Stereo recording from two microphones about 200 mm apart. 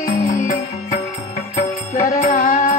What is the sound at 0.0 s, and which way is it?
Music, 40° left (ahead or behind).